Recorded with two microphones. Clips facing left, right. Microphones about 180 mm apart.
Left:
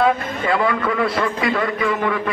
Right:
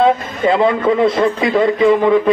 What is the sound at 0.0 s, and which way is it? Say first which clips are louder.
A man's voice: right 5 dB; 20° right (ahead or behind).